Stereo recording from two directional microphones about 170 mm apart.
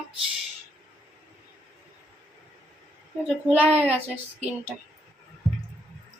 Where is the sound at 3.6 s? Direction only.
35° right (ahead or behind).